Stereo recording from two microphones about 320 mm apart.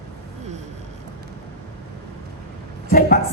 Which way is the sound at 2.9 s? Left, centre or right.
Left.